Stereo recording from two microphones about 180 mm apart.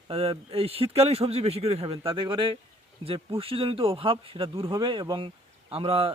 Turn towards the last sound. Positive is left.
turn(degrees=-30)  # may be behind; listen again after turning